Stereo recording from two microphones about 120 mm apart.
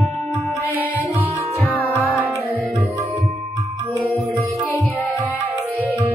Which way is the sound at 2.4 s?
15° right (ahead or behind).